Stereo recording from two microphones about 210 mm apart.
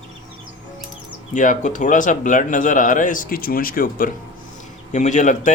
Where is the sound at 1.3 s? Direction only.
35° left (ahead or behind).